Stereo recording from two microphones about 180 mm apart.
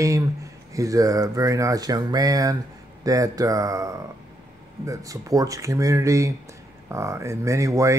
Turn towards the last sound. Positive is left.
turn(degrees=-15)  # may be behind; listen again after turning